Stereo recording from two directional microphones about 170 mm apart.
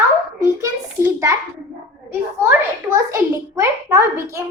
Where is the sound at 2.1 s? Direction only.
15° right (ahead or behind).